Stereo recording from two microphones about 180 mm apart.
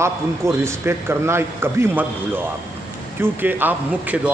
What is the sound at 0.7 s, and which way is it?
Speech, 15° right (ahead or behind).